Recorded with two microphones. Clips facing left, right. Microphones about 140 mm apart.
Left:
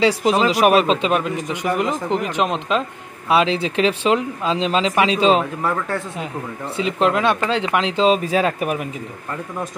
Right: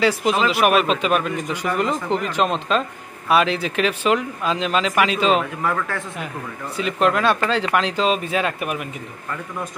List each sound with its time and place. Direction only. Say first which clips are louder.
0.0 s speech: left 2 dB; 35° left (ahead or behind)
6.8 s speech: left 1 dB; 25° left (ahead or behind)